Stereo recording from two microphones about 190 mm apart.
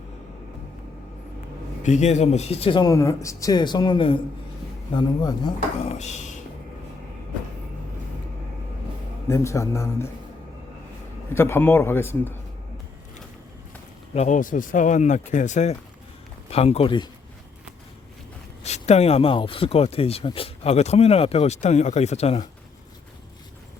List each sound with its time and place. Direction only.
1.8 s speech: 35° left (ahead or behind)
6.0 s speech: 40° left (ahead or behind)
9.2 s speech: 15° left (ahead or behind)
11.3 s speech: 10° left (ahead or behind)
14.1 s speech: 35° left (ahead or behind)
18.6 s speech: 35° left (ahead or behind)